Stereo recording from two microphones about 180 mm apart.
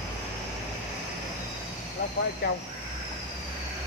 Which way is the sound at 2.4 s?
65° left (ahead or behind).